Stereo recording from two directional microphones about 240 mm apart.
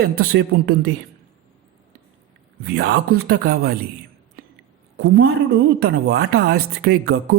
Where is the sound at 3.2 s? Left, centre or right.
Right.